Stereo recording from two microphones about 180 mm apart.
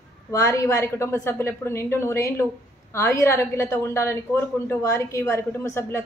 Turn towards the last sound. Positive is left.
turn(degrees=15)  # may be behind; listen again after turning